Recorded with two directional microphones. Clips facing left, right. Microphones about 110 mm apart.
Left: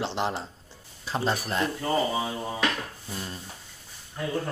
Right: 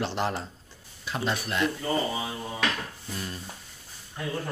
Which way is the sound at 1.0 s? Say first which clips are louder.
Left 2 dB; 35° left (ahead or behind).